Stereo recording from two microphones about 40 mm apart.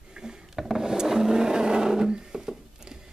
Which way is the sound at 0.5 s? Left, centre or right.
Centre.